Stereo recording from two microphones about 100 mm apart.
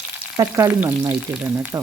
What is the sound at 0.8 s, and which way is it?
Frying, 25° right (ahead or behind).